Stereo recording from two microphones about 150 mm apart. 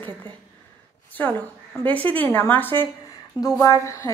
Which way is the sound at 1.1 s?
10° left (ahead or behind).